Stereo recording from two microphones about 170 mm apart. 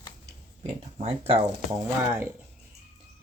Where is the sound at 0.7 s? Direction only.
35° right (ahead or behind).